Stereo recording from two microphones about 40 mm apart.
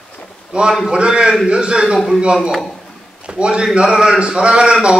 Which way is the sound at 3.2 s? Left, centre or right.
Right.